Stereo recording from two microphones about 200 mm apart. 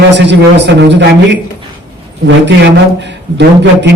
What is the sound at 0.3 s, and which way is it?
Speech, 60° right (ahead or behind).